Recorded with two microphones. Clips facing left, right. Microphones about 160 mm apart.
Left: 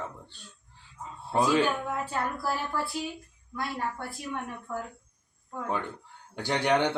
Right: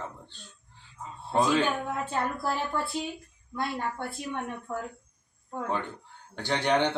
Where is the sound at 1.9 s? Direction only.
25° right (ahead or behind).